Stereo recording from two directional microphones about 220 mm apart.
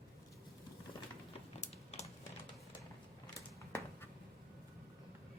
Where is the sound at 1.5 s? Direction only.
30° left (ahead or behind).